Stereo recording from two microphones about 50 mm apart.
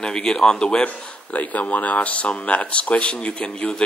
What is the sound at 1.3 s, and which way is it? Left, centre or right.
Speech, left.